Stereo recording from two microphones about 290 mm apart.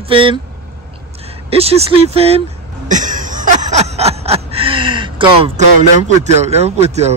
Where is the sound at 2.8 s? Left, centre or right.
Right.